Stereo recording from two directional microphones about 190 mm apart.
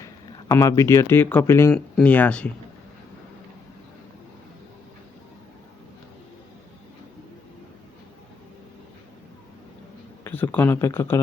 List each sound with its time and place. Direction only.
0.0 s speech: 15° left (ahead or behind)
10.2 s speech: 10° left (ahead or behind)